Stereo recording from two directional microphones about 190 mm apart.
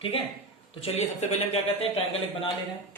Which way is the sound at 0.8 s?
35° left (ahead or behind).